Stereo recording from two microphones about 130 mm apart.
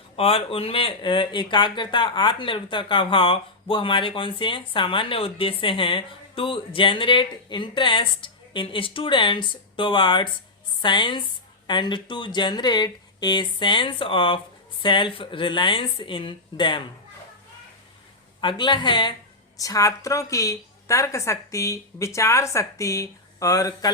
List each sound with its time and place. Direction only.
0.2 s speech: 45° left (ahead or behind)
18.3 s speech: 35° left (ahead or behind)
19.5 s a woman's voice: 25° left (ahead or behind)